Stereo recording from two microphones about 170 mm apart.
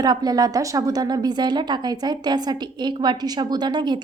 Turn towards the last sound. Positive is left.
turn(degrees=-25)  # may be behind; listen again after turning